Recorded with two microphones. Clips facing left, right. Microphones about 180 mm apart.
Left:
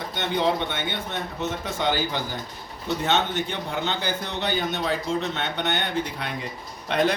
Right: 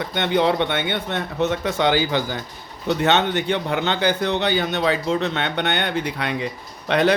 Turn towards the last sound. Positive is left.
turn(degrees=-75)  # may be behind; listen again after turning